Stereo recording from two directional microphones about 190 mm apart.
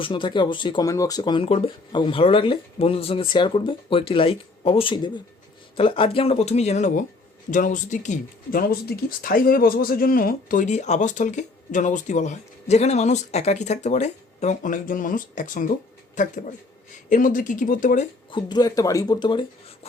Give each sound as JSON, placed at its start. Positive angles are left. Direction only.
{"t": 0.0, "sound": "speech", "side_deg": 25}
{"t": 18.3, "sound": "speech", "side_deg": 25}